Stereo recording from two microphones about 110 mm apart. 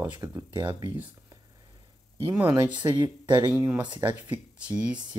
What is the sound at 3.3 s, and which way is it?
Speech, 20° right (ahead or behind).